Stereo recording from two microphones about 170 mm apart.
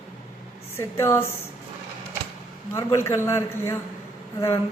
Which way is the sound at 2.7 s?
15° left (ahead or behind).